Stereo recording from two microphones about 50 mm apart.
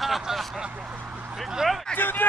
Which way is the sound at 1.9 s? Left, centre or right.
Left.